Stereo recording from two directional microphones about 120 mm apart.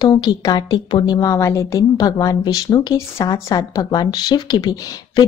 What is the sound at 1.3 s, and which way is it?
A woman's voice, 25° left (ahead or behind).